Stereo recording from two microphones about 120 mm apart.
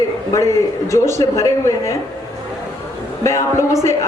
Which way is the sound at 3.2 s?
25° left (ahead or behind).